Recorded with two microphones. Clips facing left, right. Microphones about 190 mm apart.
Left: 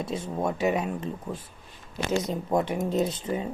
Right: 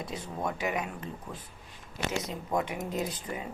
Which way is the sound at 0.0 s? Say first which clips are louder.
Left 6 dB; 25° left (ahead or behind).